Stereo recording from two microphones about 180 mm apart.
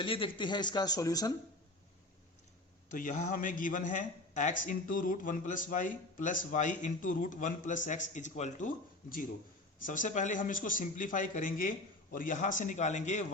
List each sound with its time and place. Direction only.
0.0 s speech: 30° left (ahead or behind)
2.9 s a man's voice: 45° left (ahead or behind)